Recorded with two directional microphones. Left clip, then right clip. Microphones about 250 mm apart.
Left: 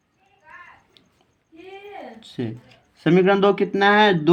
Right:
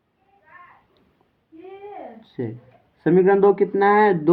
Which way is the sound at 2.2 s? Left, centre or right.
Left.